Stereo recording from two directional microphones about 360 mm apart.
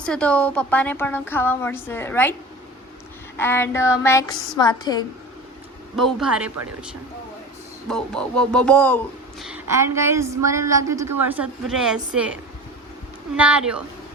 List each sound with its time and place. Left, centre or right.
0.0 s a woman's voice: centre
3.3 s a sound: centre
6.0 s a woman's voice: centre
7.9 s a woman's voice: centre
13.3 s a woman's voice: centre